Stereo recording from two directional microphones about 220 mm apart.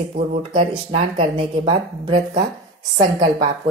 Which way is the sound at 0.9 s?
25° right (ahead or behind).